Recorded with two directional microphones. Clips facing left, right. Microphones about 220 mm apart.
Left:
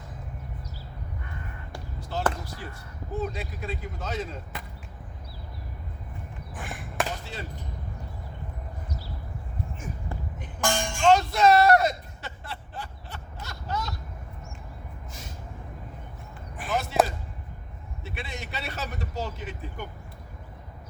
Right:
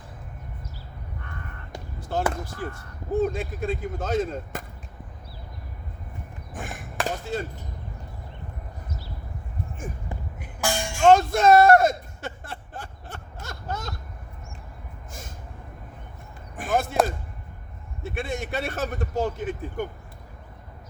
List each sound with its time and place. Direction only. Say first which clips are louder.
2.0 s basketball bounce: right 5 dB; 50° right (ahead or behind)
2.3 s speech: right 6 dB; 50° right (ahead or behind)
6.5 s a sound: right 3 dB; 45° right (ahead or behind)
10.1 s vehicle: even; 10° right (ahead or behind)
11.0 s a sound: right 3 dB; 50° right (ahead or behind)
16.6 s basketball bounce: right 4 dB; 50° right (ahead or behind)
18.0 s a man's voice: right 8 dB; 50° right (ahead or behind)